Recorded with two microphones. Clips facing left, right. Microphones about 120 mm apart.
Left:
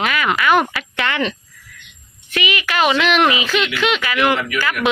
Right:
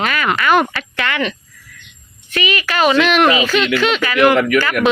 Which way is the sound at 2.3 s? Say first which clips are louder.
Right 2 dB; 15° left (ahead or behind).